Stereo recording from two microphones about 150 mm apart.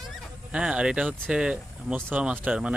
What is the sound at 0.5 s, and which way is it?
Speech, 5° right (ahead or behind).